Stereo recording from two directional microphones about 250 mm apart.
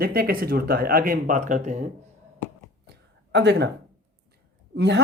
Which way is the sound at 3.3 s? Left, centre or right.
Right.